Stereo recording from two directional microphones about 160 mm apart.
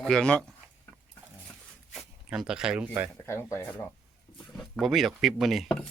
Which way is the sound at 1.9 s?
5° right (ahead or behind).